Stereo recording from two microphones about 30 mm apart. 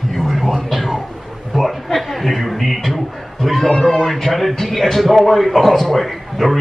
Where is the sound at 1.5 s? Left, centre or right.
Centre.